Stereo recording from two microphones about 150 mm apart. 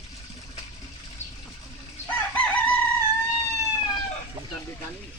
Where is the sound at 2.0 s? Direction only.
10° left (ahead or behind).